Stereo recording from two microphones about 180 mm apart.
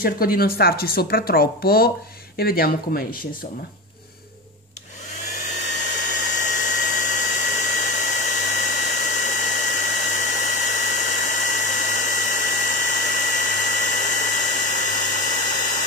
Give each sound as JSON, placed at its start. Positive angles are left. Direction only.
{"t": 0.0, "sound": "speech", "side_deg": 55}
{"t": 5.9, "sound": "hair dryer", "side_deg": 45}